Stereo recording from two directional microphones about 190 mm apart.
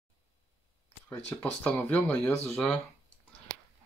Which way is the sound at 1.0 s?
5° left (ahead or behind).